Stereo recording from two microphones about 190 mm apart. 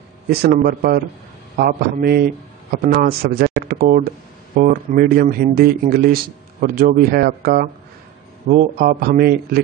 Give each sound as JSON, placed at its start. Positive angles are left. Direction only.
{"t": 0.3, "sound": "a man's voice", "side_deg": -55}